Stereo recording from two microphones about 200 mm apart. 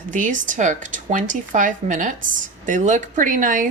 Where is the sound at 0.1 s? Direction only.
40° right (ahead or behind).